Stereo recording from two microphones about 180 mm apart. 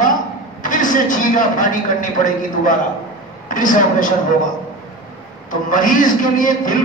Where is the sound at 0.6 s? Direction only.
45° left (ahead or behind).